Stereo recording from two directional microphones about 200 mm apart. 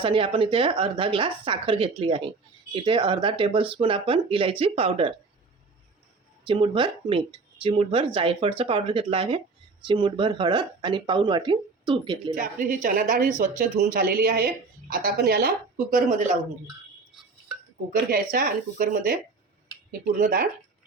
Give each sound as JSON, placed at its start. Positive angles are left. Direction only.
{"t": 0.0, "sound": "speech", "side_deg": -25}
{"t": 6.5, "sound": "speech", "side_deg": -25}
{"t": 12.4, "sound": "a woman's voice", "side_deg": -45}
{"t": 17.9, "sound": "a woman's voice", "side_deg": -50}